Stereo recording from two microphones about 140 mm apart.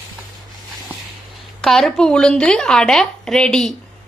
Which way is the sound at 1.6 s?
5° left (ahead or behind).